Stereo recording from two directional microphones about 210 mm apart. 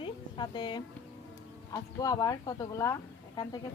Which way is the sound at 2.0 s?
15° left (ahead or behind).